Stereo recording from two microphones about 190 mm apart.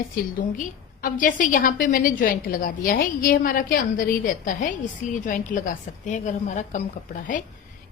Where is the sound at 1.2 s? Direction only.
45° left (ahead or behind).